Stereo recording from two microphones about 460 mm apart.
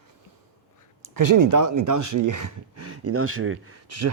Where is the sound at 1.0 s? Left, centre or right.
Right.